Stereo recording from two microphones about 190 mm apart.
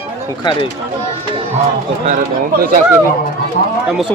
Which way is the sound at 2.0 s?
45° right (ahead or behind).